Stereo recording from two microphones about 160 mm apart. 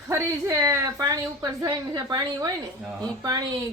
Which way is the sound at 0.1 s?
20° right (ahead or behind).